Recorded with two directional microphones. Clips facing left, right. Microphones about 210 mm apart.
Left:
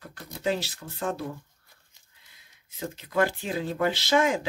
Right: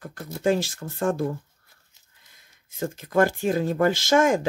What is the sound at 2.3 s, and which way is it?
Speech, 45° right (ahead or behind).